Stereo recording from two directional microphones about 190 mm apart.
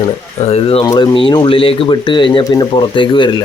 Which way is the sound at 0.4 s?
30° left (ahead or behind).